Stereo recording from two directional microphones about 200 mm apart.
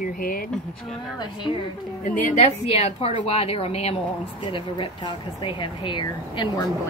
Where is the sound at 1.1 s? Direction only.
20° left (ahead or behind).